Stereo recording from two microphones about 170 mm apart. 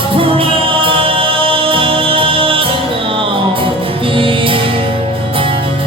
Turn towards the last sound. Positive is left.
turn(degrees=-30)  # may be behind; listen again after turning